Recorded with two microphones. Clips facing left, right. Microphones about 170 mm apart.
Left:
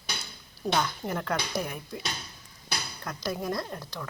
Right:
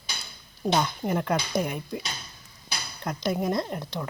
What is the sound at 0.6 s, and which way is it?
Speech, 20° right (ahead or behind).